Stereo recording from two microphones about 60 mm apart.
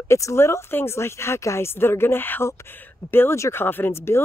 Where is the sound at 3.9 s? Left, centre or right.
Left.